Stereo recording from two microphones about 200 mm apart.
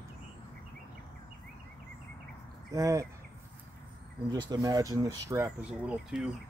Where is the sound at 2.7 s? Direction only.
15° right (ahead or behind).